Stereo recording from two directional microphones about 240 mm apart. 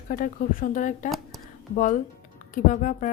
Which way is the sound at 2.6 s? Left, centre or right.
Left.